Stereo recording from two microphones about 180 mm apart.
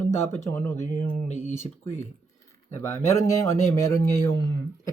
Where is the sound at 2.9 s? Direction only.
15° left (ahead or behind).